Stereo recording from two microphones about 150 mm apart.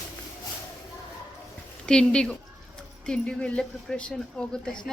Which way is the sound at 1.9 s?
5° left (ahead or behind).